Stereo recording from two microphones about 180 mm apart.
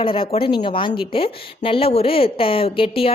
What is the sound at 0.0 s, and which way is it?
A woman's voice, 30° left (ahead or behind).